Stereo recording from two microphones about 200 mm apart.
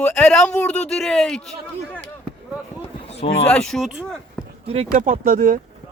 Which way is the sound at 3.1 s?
30° left (ahead or behind).